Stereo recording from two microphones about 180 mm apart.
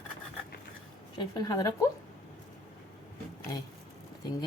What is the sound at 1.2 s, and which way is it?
Speech, 20° left (ahead or behind).